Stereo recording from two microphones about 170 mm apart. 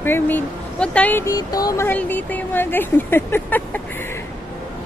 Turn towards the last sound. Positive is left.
turn(degrees=15)  # may be behind; listen again after turning